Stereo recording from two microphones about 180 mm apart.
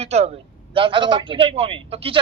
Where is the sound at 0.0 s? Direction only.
35° right (ahead or behind).